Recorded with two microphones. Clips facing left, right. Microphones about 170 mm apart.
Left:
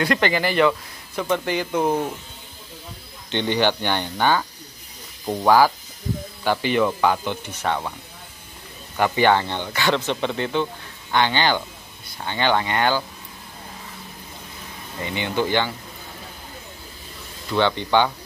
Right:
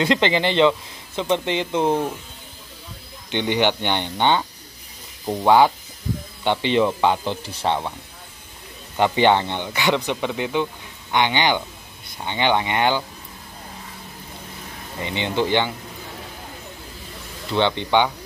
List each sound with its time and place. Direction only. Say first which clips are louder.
0.0 s speech: right 2 dB; 20° right (ahead or behind)
3.3 s speech: even; 15° right (ahead or behind)
5.2 s speech: even; centre (ahead or behind)
6.4 s speech: right 1 dB; 25° right (ahead or behind)
8.9 s speech: right 1 dB; 20° right (ahead or behind)
15.0 s speech: right 1 dB; 20° right (ahead or behind)
17.5 s speech: even; 20° right (ahead or behind)